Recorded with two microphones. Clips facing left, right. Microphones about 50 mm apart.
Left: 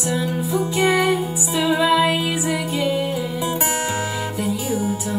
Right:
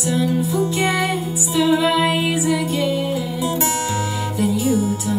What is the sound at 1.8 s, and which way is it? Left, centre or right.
Music, centre.